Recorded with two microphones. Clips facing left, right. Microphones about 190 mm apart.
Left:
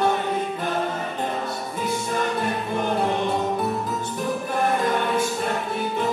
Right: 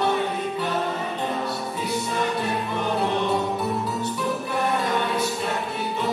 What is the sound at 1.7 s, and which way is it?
Music, 50° left (ahead or behind).